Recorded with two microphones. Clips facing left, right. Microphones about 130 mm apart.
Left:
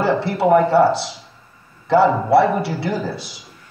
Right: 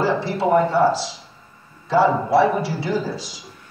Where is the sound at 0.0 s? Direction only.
65° left (ahead or behind).